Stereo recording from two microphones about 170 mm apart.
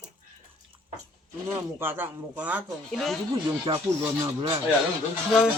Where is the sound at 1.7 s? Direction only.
15° right (ahead or behind).